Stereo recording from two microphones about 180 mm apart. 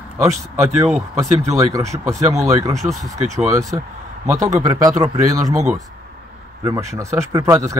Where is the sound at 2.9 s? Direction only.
Centre (ahead or behind).